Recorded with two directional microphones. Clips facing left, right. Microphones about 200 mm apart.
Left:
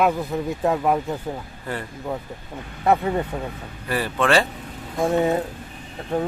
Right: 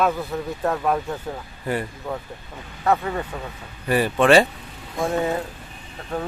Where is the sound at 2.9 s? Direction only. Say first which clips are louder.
Left 2 dB; 20° left (ahead or behind).